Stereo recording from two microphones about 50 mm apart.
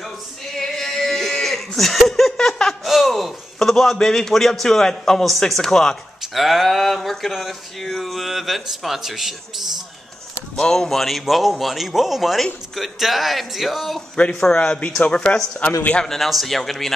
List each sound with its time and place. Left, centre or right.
0.6 s a sound: centre
2.9 s speech: centre
6.3 s speech: centre
10.5 s speech: centre
14.5 s speech: centre
16.1 s speech: centre